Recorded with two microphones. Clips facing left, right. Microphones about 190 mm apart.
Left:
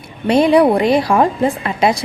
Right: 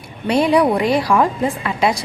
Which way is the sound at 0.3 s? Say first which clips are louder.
Left 4 dB; 25° left (ahead or behind).